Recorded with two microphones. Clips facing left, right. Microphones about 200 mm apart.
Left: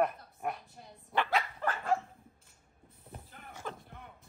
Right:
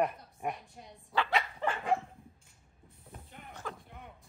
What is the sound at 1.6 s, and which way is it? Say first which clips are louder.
Dog: right 1 dB; 15° right (ahead or behind).